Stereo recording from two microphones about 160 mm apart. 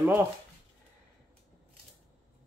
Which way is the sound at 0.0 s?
15° right (ahead or behind).